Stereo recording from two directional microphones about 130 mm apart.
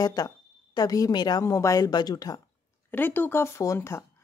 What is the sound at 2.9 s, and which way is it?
Speech, 15° left (ahead or behind).